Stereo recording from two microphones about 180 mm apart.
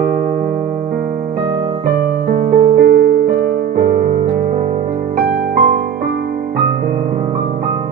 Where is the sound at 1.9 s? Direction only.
50° right (ahead or behind).